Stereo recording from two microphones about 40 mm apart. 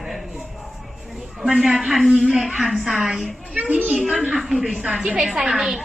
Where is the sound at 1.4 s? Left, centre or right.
Centre.